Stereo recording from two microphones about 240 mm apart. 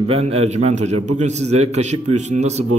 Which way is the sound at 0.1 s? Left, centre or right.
Right.